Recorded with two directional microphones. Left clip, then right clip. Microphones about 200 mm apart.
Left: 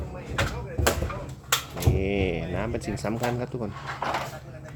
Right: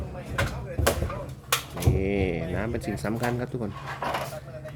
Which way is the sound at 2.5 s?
5° right (ahead or behind).